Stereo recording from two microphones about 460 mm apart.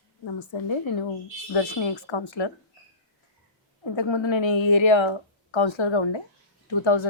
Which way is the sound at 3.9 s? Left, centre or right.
Left.